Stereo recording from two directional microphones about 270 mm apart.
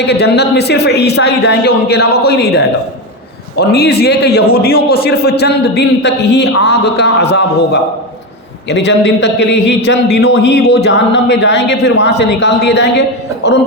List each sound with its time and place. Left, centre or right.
0.0 s a man's voice: left
3.6 s a man's voice: left